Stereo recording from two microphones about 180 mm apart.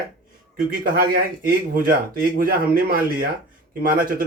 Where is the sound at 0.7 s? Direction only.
55° right (ahead or behind).